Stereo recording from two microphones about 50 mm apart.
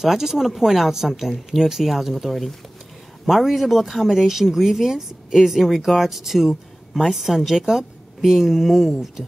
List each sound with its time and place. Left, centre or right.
0.0 s speech: centre